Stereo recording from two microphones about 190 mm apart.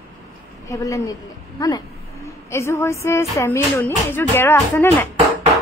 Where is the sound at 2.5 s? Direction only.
15° left (ahead or behind).